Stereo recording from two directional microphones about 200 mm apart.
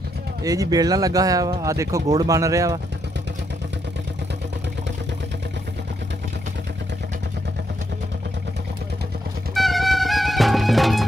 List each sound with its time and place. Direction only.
0.4 s speech: 15° right (ahead or behind)
9.5 s music: centre (ahead or behind)